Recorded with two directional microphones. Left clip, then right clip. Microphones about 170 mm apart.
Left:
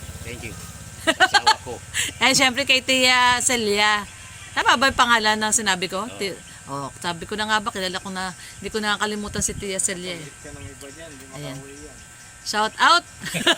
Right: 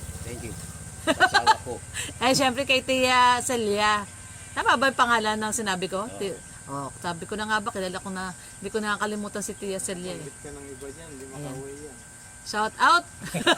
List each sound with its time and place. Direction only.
1.0 s speech: 45° left (ahead or behind)
12.5 s speech: 40° left (ahead or behind)